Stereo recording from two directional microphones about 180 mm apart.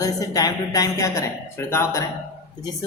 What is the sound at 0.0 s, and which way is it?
A woman's voice, 20° left (ahead or behind).